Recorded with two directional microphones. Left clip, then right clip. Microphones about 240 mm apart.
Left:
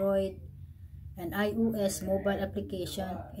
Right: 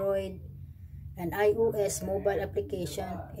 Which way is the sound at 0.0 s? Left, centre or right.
Centre.